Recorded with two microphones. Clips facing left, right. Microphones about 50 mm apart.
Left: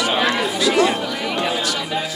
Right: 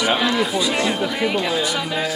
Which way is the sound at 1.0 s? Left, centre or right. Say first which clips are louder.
Right 3 dB; centre.